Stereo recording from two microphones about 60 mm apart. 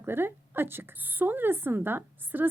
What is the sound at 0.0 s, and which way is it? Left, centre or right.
A woman's voice, right.